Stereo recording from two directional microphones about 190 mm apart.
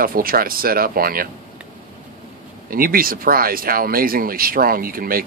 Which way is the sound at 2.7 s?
50° right (ahead or behind).